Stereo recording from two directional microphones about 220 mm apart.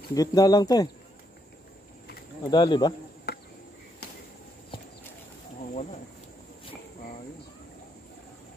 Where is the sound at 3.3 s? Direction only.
45° left (ahead or behind).